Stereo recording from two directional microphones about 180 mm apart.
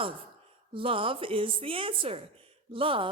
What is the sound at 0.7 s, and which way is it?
A woman's voice, 30° right (ahead or behind).